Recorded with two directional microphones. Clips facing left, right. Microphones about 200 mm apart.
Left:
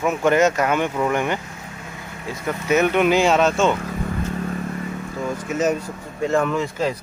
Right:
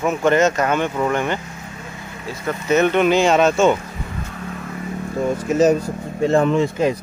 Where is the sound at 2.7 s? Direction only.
10° left (ahead or behind).